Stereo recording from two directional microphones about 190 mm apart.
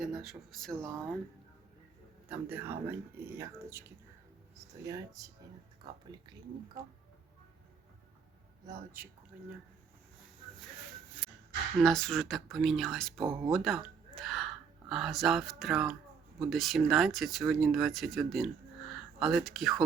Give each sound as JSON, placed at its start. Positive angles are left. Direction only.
{"t": 0.0, "sound": "speech", "side_deg": 0}
{"t": 2.3, "sound": "speech", "side_deg": -10}
{"t": 9.0, "sound": "speech", "side_deg": -10}
{"t": 11.8, "sound": "speech", "side_deg": 0}
{"t": 13.2, "sound": "speech", "side_deg": -15}
{"t": 13.5, "sound": "speech", "side_deg": 0}